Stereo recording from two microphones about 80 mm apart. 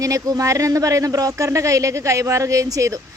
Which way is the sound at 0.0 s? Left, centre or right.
Right.